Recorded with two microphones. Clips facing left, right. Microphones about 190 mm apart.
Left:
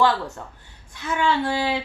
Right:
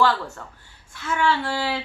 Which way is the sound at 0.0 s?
15° left (ahead or behind).